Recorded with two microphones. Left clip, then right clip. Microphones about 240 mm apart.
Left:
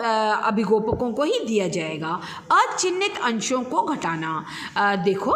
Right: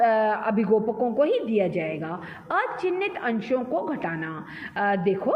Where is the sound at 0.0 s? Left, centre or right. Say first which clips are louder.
Even; left.